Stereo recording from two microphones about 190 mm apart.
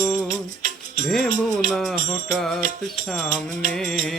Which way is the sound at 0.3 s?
45° right (ahead or behind).